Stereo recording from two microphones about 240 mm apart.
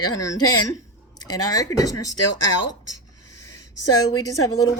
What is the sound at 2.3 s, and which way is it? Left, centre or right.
Speech, left.